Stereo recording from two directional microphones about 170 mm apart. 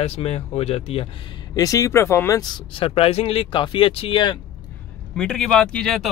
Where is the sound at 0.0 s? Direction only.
35° left (ahead or behind).